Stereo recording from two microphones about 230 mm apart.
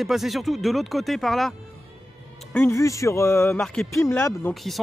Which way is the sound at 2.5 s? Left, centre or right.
Centre.